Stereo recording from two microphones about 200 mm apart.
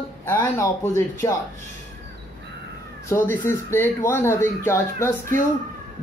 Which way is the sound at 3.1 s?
10° left (ahead or behind).